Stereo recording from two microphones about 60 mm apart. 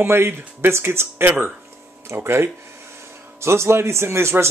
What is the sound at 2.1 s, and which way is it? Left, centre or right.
A man's voice, right.